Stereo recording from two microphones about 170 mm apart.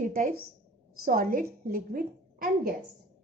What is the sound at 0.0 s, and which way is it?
A woman's voice, 55° right (ahead or behind).